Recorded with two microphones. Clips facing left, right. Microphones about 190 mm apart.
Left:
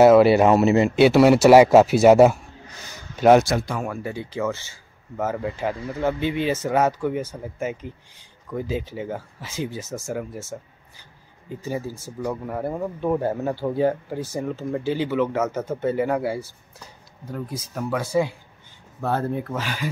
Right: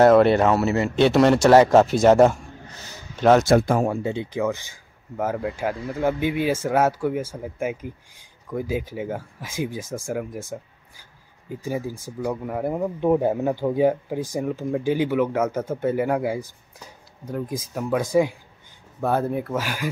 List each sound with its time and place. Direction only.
0.0 s speech: 5° left (ahead or behind)
3.4 s speech: 50° right (ahead or behind)
3.8 s speech: 25° right (ahead or behind)